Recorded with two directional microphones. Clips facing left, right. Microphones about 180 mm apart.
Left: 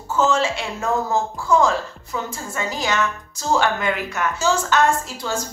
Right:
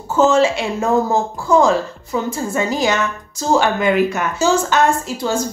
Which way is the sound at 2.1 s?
20° right (ahead or behind).